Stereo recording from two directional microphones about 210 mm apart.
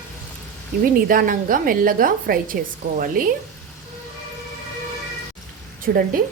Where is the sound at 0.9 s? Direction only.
40° right (ahead or behind).